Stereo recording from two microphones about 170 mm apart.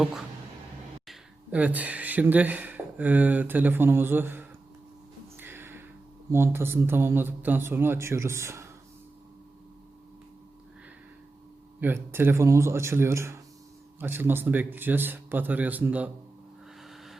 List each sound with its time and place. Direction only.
1.0 s speech: 10° right (ahead or behind)
5.4 s a sound: 15° right (ahead or behind)
6.3 s a man's voice: 15° right (ahead or behind)
11.8 s a man's voice: 10° right (ahead or behind)
16.8 s vehicle: centre (ahead or behind)